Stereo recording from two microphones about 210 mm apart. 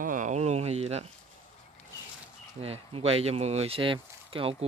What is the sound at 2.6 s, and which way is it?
Speech, 30° right (ahead or behind).